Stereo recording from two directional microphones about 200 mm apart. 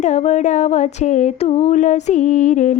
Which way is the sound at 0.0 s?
35° left (ahead or behind).